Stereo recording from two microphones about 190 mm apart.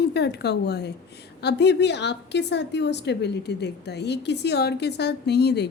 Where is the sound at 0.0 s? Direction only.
60° left (ahead or behind).